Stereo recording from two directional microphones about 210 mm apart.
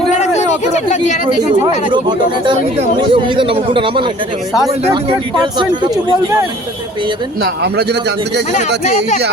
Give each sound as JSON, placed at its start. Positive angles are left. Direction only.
{"t": 0.1, "sound": "a sound", "side_deg": 35}
{"t": 1.9, "sound": "speech", "side_deg": -20}
{"t": 5.5, "sound": "speech", "side_deg": -20}
{"t": 7.4, "sound": "speech", "side_deg": -50}